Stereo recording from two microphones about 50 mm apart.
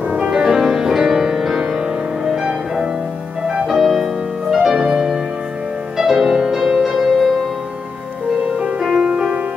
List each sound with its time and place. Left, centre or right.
0.1 s music: centre
8.5 s music: centre